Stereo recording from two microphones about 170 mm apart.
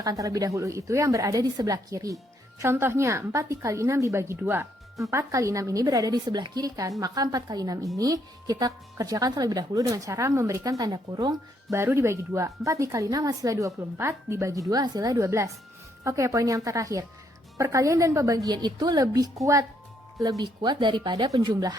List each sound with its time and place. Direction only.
0.0 s a woman's voice: 20° right (ahead or behind)
20.4 s speech: 25° right (ahead or behind)